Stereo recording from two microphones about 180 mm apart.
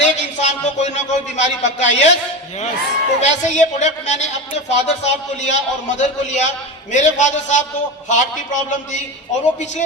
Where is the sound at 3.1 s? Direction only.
40° left (ahead or behind).